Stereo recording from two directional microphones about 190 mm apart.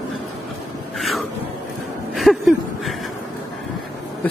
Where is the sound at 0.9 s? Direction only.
Centre (ahead or behind).